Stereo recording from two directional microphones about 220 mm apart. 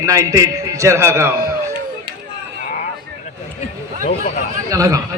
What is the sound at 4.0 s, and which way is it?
Speech, 35° left (ahead or behind).